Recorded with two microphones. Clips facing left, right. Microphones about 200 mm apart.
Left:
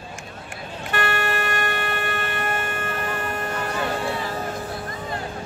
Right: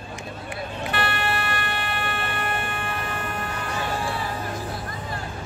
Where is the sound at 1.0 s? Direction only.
45° left (ahead or behind).